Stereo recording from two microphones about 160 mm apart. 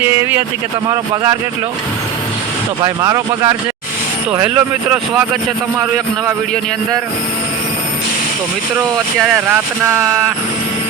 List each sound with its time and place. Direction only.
0.0 s speech: 15° right (ahead or behind)
2.8 s speech: 20° right (ahead or behind)
4.3 s speech: 10° right (ahead or behind)
9.1 s speech: 5° right (ahead or behind)